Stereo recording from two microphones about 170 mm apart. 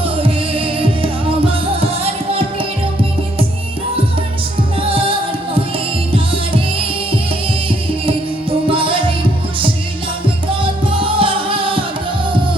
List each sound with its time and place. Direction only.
0.2 s music: 30° right (ahead or behind)
4.9 s music: 30° right (ahead or behind)
8.0 s music: 30° right (ahead or behind)
11.0 s music: 30° right (ahead or behind)